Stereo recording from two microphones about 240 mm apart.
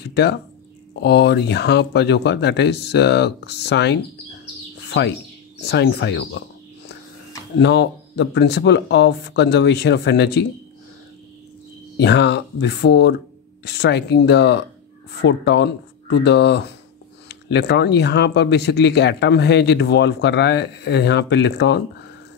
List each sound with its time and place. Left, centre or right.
0.0 s a sound: left
1.0 s speech: left
4.8 s bird: left
5.7 s speech: left
7.5 s speech: left
12.0 s speech: left